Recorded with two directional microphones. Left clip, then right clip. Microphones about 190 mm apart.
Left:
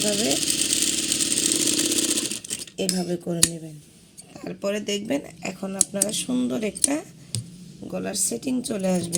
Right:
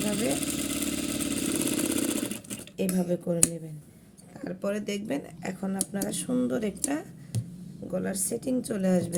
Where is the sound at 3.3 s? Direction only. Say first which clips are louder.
Even; 40° left (ahead or behind).